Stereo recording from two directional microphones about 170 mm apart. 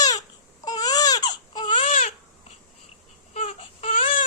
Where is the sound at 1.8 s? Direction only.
50° left (ahead or behind).